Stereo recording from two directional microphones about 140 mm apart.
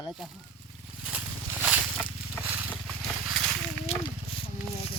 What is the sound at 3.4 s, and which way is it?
Wild animals, 25° right (ahead or behind).